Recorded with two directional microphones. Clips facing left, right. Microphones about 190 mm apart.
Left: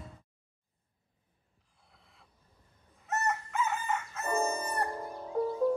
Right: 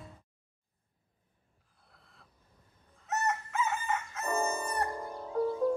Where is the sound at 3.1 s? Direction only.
Centre (ahead or behind).